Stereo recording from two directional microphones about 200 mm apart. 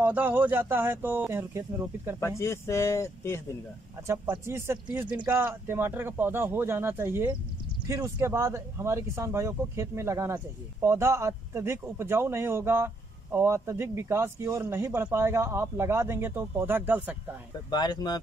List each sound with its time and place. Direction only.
0.0 s speech: 10° right (ahead or behind)
2.1 s speech: 15° left (ahead or behind)
4.1 s speech: 15° right (ahead or behind)
17.6 s speech: 20° left (ahead or behind)